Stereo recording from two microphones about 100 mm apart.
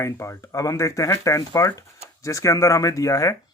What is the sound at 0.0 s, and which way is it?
Speech, 30° left (ahead or behind).